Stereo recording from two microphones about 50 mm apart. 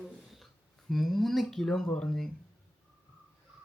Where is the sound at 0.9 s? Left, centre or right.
Centre.